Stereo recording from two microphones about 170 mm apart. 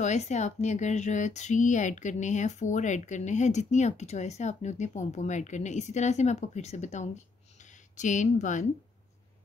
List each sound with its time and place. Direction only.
0.0 s speech: 45° left (ahead or behind)